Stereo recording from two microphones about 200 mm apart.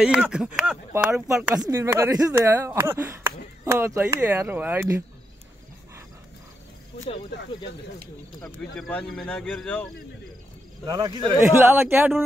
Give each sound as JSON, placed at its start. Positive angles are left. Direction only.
{"t": 0.0, "sound": "speech", "side_deg": -5}
{"t": 1.5, "sound": "speech", "side_deg": -15}
{"t": 8.4, "sound": "speech", "side_deg": 5}
{"t": 10.9, "sound": "speech", "side_deg": -20}